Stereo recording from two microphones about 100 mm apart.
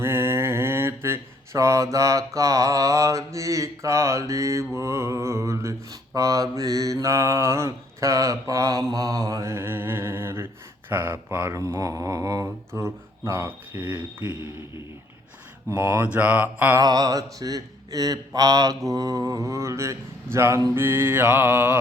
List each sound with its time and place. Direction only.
0.0 s mantra: 25° right (ahead or behind)
15.7 s mantra: 20° right (ahead or behind)
16.7 s mantra: 40° right (ahead or behind)
20.7 s mantra: 20° right (ahead or behind)